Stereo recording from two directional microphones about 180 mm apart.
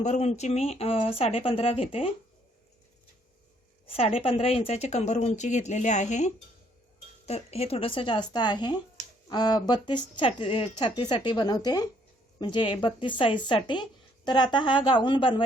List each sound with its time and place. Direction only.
0.0 s speech: 40° left (ahead or behind)
3.8 s speech: 30° left (ahead or behind)